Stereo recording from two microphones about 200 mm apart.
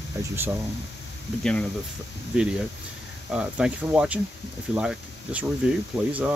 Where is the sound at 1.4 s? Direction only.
5° left (ahead or behind).